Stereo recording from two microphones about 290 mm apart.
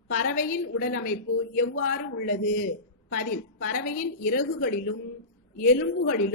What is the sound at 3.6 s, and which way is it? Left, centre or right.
A woman's voice, left.